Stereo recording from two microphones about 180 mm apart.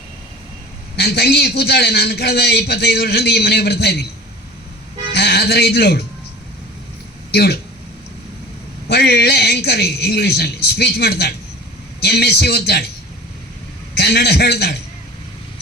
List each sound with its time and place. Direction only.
0.9 s a man's voice: 65° left (ahead or behind)
5.1 s a man's voice: 65° left (ahead or behind)
7.3 s a man's voice: 60° left (ahead or behind)
8.9 s a man's voice: 65° left (ahead or behind)
13.9 s a man's voice: 65° left (ahead or behind)